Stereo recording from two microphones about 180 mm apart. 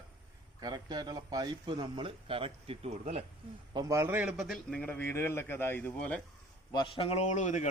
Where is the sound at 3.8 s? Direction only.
15° right (ahead or behind); by 6.2 s 5° left (ahead or behind).